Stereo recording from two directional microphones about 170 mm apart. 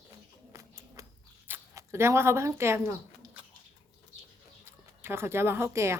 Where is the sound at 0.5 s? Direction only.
15° right (ahead or behind).